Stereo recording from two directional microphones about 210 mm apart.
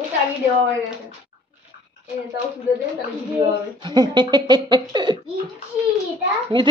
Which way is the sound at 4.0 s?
20° right (ahead or behind).